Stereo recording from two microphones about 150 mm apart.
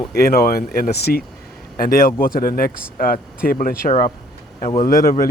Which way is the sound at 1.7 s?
75° left (ahead or behind).